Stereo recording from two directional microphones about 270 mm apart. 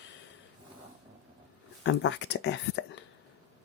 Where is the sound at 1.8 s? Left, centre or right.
Left.